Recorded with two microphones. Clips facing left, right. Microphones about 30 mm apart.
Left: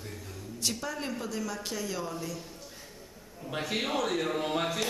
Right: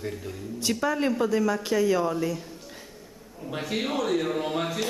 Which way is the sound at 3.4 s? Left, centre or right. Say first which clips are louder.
Right 3 dB; centre.